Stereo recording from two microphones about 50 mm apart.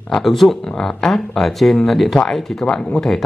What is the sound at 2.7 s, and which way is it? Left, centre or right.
Speech, centre.